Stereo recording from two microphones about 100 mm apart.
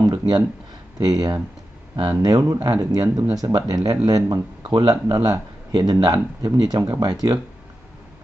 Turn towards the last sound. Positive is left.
turn(degrees=-45)  # may be behind; listen again after turning